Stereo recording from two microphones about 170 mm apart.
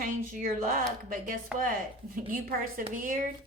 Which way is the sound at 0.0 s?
50° right (ahead or behind).